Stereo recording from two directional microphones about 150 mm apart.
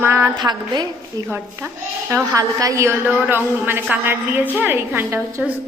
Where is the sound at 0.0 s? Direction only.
15° right (ahead or behind).